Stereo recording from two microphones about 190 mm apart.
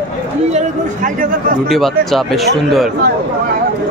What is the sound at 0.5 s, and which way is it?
Speech, 40° right (ahead or behind).